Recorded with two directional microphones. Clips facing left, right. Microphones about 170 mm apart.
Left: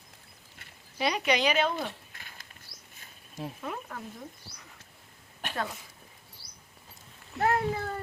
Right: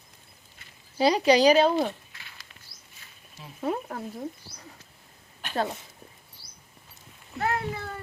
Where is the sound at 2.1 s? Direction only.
45° left (ahead or behind).